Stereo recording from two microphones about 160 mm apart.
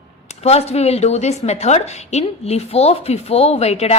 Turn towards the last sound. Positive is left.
turn(degrees=40)  # may be behind; listen again after turning